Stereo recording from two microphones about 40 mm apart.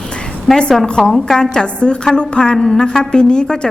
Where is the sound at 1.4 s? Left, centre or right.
Left.